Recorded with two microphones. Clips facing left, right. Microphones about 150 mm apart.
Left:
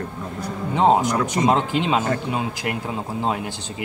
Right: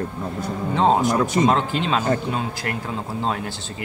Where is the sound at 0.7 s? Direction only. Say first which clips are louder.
Left 1 dB; 15° left (ahead or behind).